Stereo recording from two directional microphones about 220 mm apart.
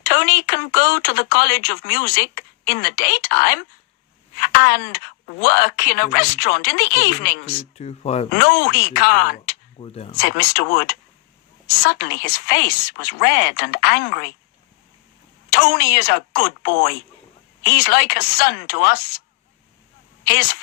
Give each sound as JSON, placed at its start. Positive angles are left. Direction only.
{"t": 0.0, "sound": "speech", "side_deg": 45}
{"t": 7.8, "sound": "speech", "side_deg": 30}
{"t": 8.4, "sound": "speech", "side_deg": 45}
{"t": 9.8, "sound": "speech", "side_deg": 25}
{"t": 10.2, "sound": "speech", "side_deg": 45}
{"t": 15.4, "sound": "speech", "side_deg": 45}
{"t": 20.2, "sound": "speech", "side_deg": 45}